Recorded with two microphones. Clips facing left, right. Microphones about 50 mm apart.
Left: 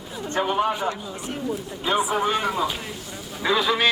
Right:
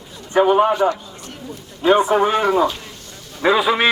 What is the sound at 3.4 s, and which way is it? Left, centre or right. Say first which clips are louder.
Speech: right 7 dB; right.